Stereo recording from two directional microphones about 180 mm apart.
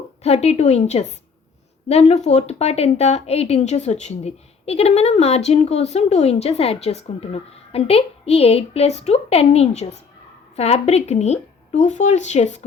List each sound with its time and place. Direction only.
0.2 s a woman's voice: 35° left (ahead or behind)